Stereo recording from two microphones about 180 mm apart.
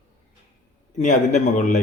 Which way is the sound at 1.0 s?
40° left (ahead or behind).